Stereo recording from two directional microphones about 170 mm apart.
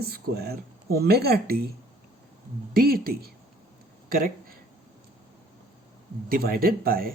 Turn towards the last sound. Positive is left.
turn(degrees=-60)  # may be behind; listen again after turning